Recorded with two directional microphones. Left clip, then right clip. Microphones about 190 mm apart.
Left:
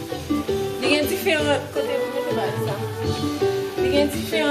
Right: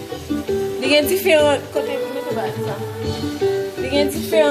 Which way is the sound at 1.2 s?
55° right (ahead or behind).